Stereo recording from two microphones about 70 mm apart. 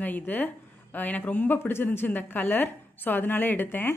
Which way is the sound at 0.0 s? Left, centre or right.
Left.